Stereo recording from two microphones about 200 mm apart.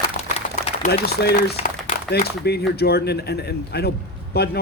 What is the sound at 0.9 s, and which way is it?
Speech, 45° left (ahead or behind).